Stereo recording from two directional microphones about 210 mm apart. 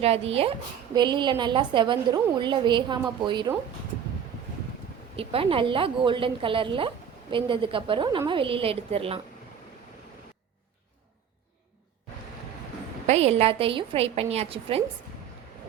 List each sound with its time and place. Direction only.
0.0 s a woman's voice: 30° right (ahead or behind)
5.1 s a woman's voice: 25° right (ahead or behind)
13.1 s a woman's voice: 30° right (ahead or behind)